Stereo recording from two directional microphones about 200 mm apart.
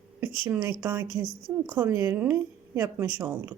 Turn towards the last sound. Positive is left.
turn(degrees=-10)  # may be behind; listen again after turning